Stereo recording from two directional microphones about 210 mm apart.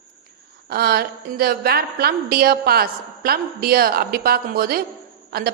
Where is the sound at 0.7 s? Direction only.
45° right (ahead or behind).